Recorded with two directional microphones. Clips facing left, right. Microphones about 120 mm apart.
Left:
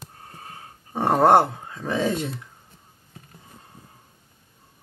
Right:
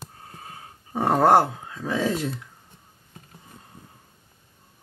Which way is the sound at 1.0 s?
20° left (ahead or behind).